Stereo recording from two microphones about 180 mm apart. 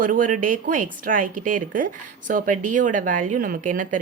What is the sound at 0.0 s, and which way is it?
Speech, 50° right (ahead or behind).